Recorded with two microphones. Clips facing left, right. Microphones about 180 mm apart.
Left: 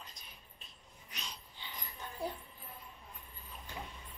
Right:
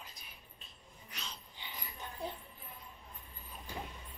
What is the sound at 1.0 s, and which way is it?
Dog, 15° left (ahead or behind).